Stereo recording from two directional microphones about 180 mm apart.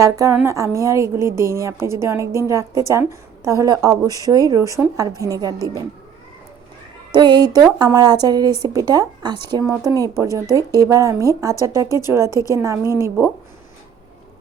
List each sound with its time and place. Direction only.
0.0 s a woman's voice: 15° right (ahead or behind)
7.1 s a woman's voice: 25° right (ahead or behind); by 13.3 s 10° right (ahead or behind)